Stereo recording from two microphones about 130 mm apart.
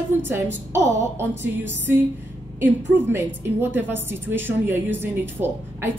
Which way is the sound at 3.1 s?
15° right (ahead or behind).